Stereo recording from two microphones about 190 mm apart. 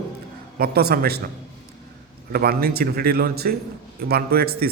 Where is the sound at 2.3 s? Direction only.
55° right (ahead or behind).